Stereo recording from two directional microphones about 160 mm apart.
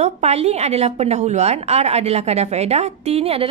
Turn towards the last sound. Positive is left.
turn(degrees=-40)  # may be behind; listen again after turning